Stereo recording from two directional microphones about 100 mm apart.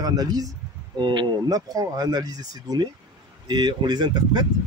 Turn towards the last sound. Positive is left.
turn(degrees=-45)  # may be behind; listen again after turning